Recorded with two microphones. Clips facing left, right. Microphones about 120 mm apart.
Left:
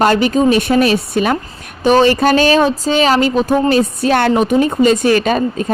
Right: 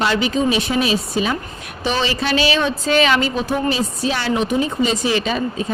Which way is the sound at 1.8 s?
45° left (ahead or behind).